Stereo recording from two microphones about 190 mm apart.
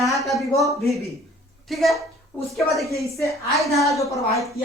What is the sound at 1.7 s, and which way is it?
Speech, centre (ahead or behind).